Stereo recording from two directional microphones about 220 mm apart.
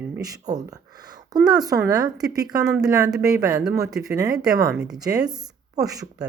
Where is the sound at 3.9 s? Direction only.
15° right (ahead or behind).